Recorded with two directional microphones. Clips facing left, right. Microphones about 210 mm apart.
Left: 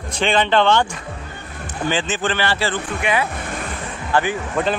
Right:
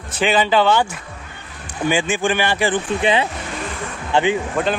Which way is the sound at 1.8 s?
10° right (ahead or behind).